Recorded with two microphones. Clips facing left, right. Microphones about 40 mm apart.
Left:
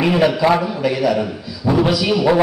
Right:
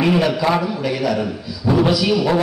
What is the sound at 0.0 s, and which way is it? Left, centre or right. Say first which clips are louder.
A man's voice: left 2 dB; centre.